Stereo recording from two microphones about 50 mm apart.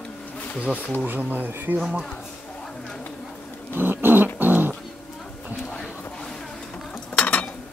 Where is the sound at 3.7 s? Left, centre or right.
Right.